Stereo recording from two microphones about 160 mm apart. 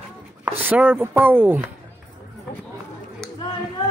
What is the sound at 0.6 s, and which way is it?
Speech, 10° right (ahead or behind).